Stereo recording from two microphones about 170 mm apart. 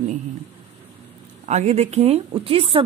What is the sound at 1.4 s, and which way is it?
Speech, 40° right (ahead or behind).